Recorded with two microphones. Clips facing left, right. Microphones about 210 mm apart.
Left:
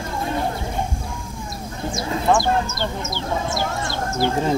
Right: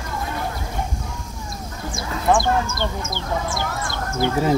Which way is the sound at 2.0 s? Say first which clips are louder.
Left 4 dB; 25° left (ahead or behind).